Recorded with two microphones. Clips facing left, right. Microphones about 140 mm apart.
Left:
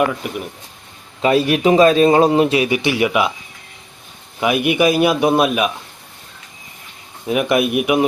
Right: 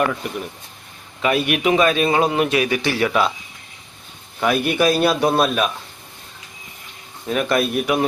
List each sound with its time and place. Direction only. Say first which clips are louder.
0.0 s a man's voice: left 3 dB; 10° left (ahead or behind)
1.2 s a man's voice: left 4 dB; 30° left (ahead or behind); by 3.3 s 15° left (ahead or behind)
4.4 s a man's voice: left 2 dB; 10° left (ahead or behind)
7.3 s a man's voice: left 3 dB; 15° left (ahead or behind)